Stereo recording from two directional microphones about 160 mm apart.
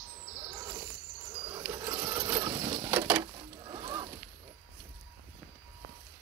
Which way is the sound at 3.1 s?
25° right (ahead or behind).